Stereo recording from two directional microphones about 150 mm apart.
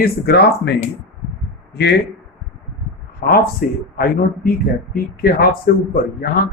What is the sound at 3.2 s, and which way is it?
A man's voice, 80° left.